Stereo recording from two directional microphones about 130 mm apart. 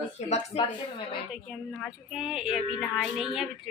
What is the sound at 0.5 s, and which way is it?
Speech, 50° left (ahead or behind).